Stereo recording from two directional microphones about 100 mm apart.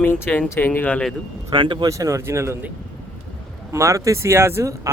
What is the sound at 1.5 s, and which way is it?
Speech, 55° right (ahead or behind).